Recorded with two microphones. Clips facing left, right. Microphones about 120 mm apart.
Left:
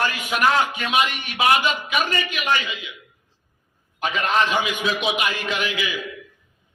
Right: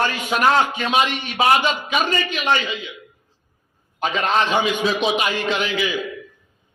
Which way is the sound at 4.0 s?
30° right (ahead or behind).